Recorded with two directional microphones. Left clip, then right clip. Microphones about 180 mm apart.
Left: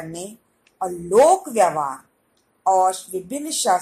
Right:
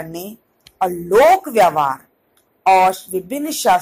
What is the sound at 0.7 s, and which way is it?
A woman's voice, 20° right (ahead or behind).